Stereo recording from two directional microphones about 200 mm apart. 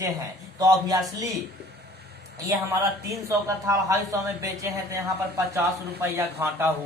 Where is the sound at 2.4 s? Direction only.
15° right (ahead or behind).